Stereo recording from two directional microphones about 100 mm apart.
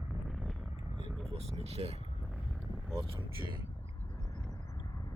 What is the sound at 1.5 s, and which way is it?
Speech, 90° right.